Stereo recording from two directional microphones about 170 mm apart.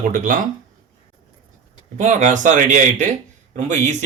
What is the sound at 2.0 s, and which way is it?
Speech, 45° right (ahead or behind).